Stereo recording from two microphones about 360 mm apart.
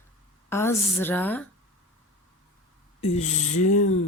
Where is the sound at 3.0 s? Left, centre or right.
Centre.